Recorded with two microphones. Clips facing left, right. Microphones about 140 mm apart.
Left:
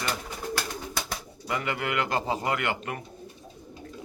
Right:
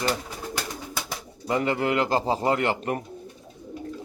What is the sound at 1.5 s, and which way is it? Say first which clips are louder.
Speech: right 6 dB; 30° right (ahead or behind).